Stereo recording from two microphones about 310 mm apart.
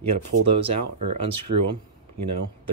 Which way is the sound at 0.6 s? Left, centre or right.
Right.